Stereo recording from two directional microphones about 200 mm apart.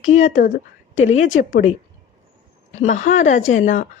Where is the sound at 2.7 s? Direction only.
40° left (ahead or behind).